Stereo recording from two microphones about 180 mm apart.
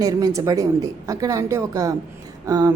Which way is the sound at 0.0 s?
20° right (ahead or behind).